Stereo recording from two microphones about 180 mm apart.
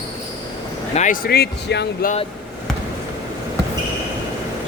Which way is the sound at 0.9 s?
45° left (ahead or behind).